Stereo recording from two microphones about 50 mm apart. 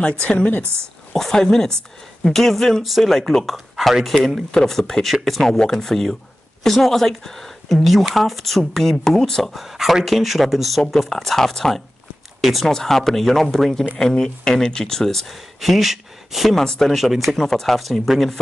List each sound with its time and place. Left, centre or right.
0.2 s a woman's voice: left
1.1 s speech: centre
16.5 s speech: centre
16.9 s speech: centre
17.4 s speech: centre